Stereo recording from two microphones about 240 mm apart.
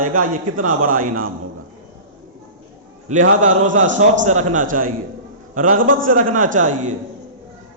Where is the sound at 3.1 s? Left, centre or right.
Right.